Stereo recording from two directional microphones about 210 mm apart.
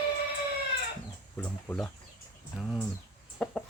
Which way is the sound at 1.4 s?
5° left (ahead or behind).